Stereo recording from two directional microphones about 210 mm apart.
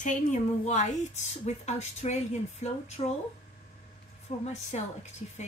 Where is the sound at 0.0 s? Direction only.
35° left (ahead or behind).